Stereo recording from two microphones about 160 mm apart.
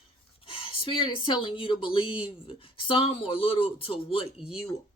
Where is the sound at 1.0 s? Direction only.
35° left (ahead or behind).